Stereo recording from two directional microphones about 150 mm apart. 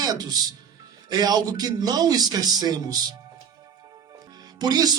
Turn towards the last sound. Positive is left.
turn(degrees=-25)  # may be behind; listen again after turning